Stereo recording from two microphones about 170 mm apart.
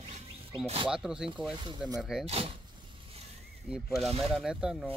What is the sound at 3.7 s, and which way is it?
Speech, centre (ahead or behind).